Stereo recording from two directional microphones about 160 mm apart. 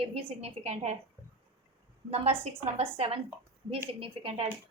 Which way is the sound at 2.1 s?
40° right (ahead or behind).